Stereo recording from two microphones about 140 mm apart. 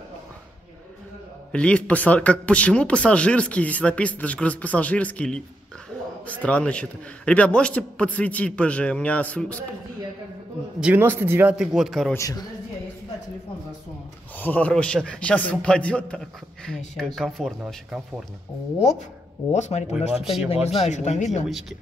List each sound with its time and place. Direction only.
1.5 s a man's voice: 10° left (ahead or behind)
10.8 s speech: 15° right (ahead or behind)
11.5 s speech: 5° right (ahead or behind)
12.1 s speech: 25° left (ahead or behind)
14.4 s a man's voice: 10° left (ahead or behind)
19.5 s speech: 55° left (ahead or behind)
21.5 s speech: centre (ahead or behind)